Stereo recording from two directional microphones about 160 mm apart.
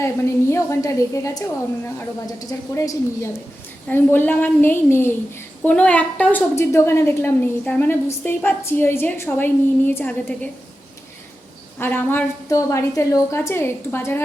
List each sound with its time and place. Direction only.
0.0 s a woman's voice: 15° left (ahead or behind)
11.8 s a woman's voice: 10° left (ahead or behind)